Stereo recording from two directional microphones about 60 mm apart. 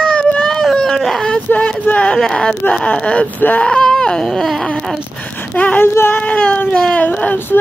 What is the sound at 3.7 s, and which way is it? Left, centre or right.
Baby cry, centre.